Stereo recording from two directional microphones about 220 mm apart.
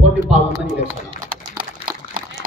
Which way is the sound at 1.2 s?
40° right (ahead or behind).